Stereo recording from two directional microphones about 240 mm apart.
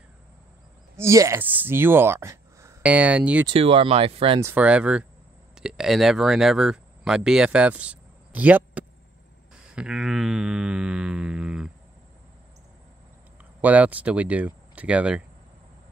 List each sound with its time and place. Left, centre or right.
0.9 s speech: centre
3.4 s speech: right
4.4 s speech: centre
9.8 s a sound: centre
13.6 s speech: centre